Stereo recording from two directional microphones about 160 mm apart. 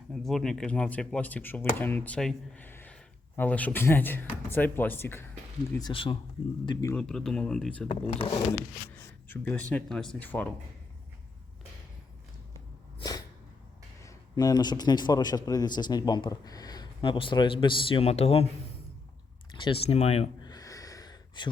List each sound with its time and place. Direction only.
0.1 s speech: centre (ahead or behind)
5.8 s speech: 35° left (ahead or behind)
6.9 s speech: 5° left (ahead or behind)
7.9 s speech: 40° left (ahead or behind)
9.3 s speech: 10° left (ahead or behind)
13.0 s a sound: 25° left (ahead or behind)
14.0 s a man's voice: 20° left (ahead or behind); by 18.4 s 40° left (ahead or behind)
19.5 s speech: 35° left (ahead or behind)
20.4 s a sound: 25° left (ahead or behind)